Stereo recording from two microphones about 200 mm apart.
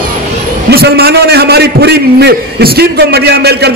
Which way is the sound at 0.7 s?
50° right (ahead or behind).